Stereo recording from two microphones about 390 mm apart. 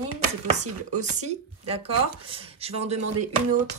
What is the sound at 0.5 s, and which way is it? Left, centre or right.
Speech, centre.